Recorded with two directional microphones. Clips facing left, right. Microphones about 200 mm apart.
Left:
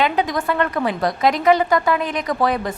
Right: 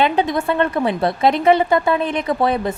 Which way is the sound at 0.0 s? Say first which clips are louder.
Right 2 dB; 25° right (ahead or behind).